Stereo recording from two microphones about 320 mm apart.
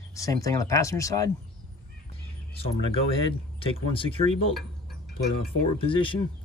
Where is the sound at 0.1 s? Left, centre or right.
Centre.